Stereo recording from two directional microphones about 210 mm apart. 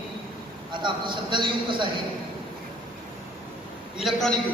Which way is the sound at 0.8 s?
20° right (ahead or behind).